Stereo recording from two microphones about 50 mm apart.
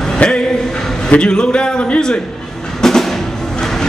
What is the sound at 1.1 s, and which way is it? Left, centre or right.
Speech, centre.